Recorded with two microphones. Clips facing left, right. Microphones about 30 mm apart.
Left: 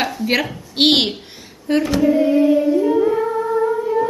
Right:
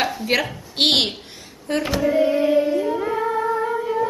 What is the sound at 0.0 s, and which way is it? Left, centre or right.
A woman's voice, centre.